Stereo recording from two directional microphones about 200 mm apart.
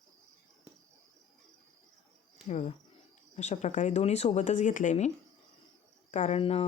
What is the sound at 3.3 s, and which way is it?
Speech, 35° left (ahead or behind).